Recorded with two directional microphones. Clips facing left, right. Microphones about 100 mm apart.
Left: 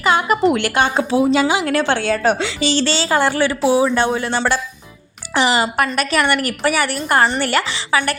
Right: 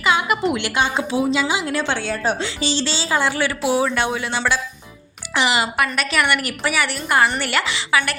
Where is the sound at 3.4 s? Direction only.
30° left (ahead or behind).